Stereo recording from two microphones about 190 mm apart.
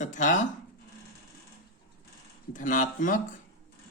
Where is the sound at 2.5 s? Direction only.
45° left (ahead or behind).